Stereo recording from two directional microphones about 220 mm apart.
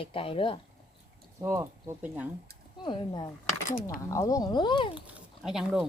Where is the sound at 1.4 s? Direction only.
10° right (ahead or behind).